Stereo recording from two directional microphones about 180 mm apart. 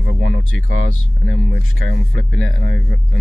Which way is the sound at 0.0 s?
65° right (ahead or behind).